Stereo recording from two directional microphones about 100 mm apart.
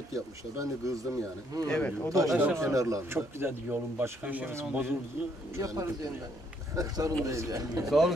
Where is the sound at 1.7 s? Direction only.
15° left (ahead or behind).